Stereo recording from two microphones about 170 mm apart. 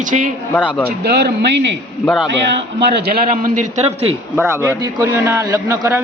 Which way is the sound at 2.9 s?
65° right (ahead or behind).